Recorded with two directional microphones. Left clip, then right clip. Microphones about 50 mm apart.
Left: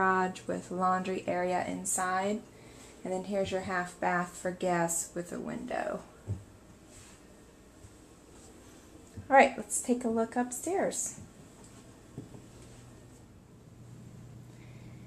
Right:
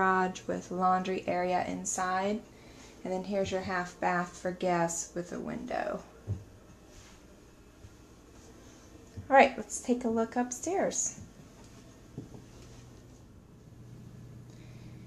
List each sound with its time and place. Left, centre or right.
0.0 s a sound: centre
0.7 s a woman's voice: centre
9.3 s a woman's voice: centre